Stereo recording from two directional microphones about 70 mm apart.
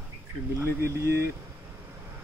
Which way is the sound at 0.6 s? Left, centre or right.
Right.